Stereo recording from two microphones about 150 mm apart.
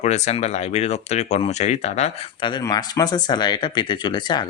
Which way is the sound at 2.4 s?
30° left (ahead or behind).